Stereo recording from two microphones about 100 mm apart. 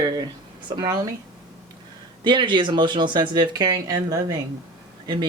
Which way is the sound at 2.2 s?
50° right (ahead or behind).